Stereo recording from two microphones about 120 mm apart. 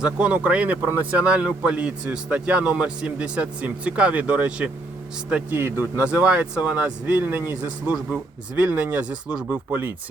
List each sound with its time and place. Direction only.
0.0 s a man's voice: 10° right (ahead or behind)